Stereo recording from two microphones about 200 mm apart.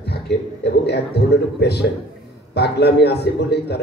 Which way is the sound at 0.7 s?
55° left (ahead or behind).